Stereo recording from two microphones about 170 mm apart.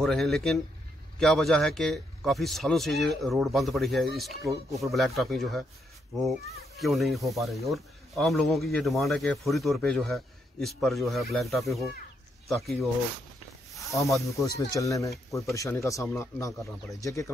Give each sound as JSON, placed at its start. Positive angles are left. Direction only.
{"t": 0.0, "sound": "speech", "side_deg": 0}
{"t": 6.8, "sound": "speech", "side_deg": 0}
{"t": 13.9, "sound": "speech", "side_deg": 0}
{"t": 14.7, "sound": "speech", "side_deg": 20}